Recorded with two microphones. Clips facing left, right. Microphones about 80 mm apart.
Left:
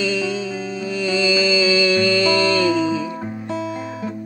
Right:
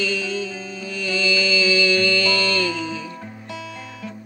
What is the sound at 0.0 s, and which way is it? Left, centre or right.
Music, centre.